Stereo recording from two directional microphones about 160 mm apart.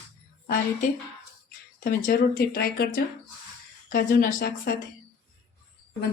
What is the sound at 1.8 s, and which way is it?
Speech, 65° left (ahead or behind).